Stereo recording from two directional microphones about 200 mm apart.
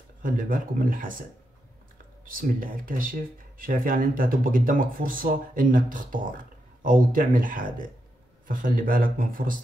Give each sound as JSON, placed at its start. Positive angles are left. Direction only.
{"t": 0.2, "sound": "speech", "side_deg": -45}
{"t": 2.2, "sound": "speech", "side_deg": -45}